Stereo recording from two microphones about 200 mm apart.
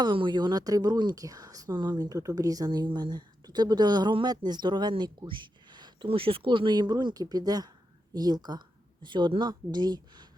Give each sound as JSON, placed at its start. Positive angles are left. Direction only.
{"t": 0.0, "sound": "speech", "side_deg": -25}